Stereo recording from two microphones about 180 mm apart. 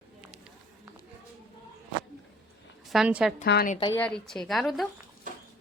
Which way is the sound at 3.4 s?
70° left (ahead or behind).